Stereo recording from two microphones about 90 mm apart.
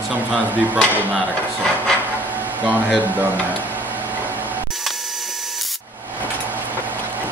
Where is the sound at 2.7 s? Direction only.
15° right (ahead or behind).